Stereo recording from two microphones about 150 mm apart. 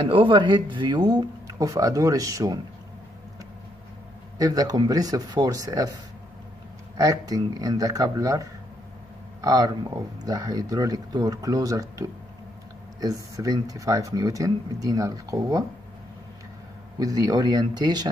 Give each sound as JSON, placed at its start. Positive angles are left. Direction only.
{"t": 0.1, "sound": "speech", "side_deg": -35}
{"t": 4.4, "sound": "speech", "side_deg": -25}
{"t": 7.0, "sound": "speech", "side_deg": -25}
{"t": 17.0, "sound": "speech", "side_deg": -25}